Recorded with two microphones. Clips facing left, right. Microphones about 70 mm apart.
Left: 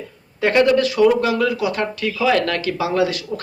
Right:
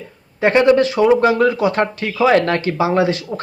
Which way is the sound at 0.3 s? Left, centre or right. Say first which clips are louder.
Right 3 dB; right.